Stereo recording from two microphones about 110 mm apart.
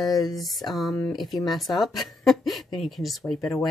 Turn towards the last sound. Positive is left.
turn(degrees=5)  # may be behind; listen again after turning